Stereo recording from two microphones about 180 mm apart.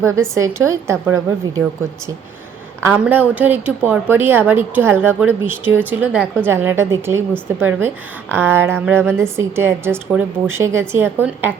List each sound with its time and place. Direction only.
0.0 s a woman's voice: 15° right (ahead or behind)
2.8 s a woman's voice: 10° right (ahead or behind)